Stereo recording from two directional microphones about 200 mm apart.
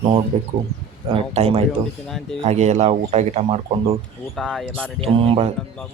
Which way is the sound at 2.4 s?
35° right (ahead or behind).